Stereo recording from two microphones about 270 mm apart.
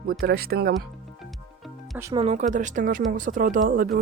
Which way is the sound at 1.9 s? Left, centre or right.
Centre.